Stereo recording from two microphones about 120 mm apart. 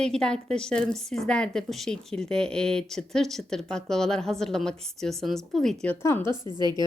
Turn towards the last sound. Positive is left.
turn(degrees=-35)  # may be behind; listen again after turning